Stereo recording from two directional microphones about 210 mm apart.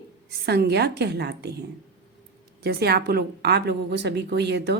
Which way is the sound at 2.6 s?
50° right (ahead or behind).